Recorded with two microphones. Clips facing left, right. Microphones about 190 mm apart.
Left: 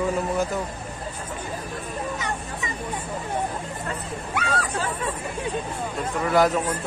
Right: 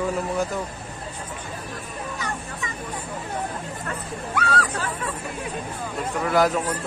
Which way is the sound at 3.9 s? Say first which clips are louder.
Right 1 dB; 25° left (ahead or behind).